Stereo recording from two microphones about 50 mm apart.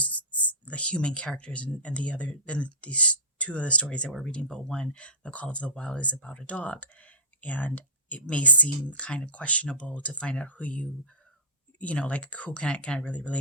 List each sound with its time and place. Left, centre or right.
0.0 s speech: left